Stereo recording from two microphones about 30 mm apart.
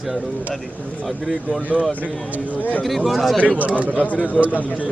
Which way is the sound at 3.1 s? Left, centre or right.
Centre.